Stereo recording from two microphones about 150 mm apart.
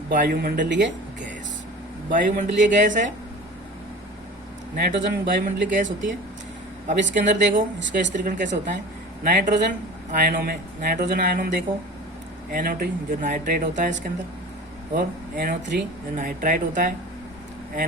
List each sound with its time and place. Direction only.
0.1 s speech: 70° right (ahead or behind)
2.0 s speech: 60° right (ahead or behind)
4.8 s speech: 85° right; by 8.8 s 60° right (ahead or behind)
9.2 s speech: 70° right (ahead or behind)